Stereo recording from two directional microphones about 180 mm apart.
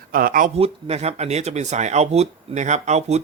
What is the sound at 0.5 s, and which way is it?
Speech, 35° right (ahead or behind).